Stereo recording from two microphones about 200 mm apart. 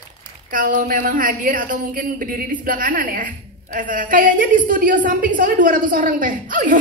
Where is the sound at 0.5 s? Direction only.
40° right (ahead or behind).